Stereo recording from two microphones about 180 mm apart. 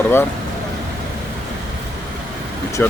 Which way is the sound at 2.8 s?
10° left (ahead or behind).